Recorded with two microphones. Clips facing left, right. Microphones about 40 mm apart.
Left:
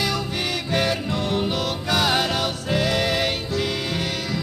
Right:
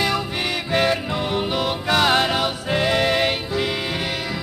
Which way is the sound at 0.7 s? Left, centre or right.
Centre.